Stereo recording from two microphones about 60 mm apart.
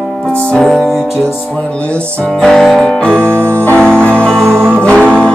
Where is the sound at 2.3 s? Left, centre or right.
Centre.